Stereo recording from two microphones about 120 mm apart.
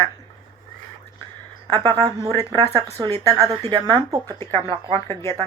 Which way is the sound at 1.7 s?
45° right (ahead or behind).